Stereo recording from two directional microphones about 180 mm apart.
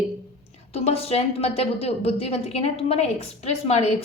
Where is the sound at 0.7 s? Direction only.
35° left (ahead or behind).